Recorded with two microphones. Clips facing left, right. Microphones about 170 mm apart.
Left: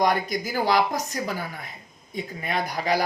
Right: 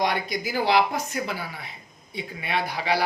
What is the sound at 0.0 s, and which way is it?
Speech, 45° left (ahead or behind).